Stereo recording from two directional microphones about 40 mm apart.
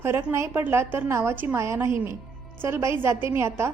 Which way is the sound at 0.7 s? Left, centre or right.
Right.